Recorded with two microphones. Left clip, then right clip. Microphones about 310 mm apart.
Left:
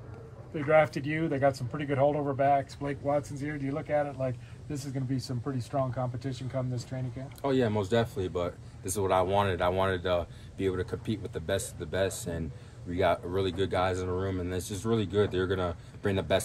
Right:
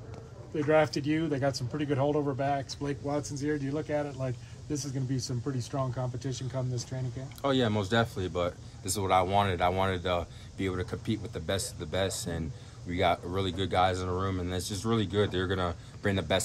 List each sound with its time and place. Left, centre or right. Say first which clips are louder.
0.7 s speech: left 1 dB; left
7.4 s speech: even; centre
14.6 s speech: right 1 dB; centre
14.9 s speech: left 1 dB; centre